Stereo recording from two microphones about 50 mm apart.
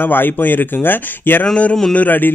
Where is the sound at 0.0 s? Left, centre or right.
Left.